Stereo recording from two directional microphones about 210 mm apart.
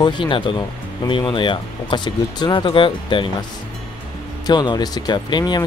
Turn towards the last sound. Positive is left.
turn(degrees=20)  # may be behind; listen again after turning